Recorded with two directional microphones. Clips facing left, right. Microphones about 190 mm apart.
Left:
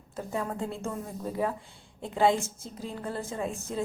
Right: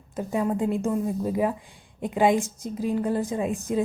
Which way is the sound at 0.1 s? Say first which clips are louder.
Right 7 dB; 15° right (ahead or behind).